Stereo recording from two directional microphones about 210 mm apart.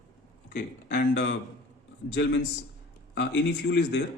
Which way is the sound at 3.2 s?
55° left (ahead or behind).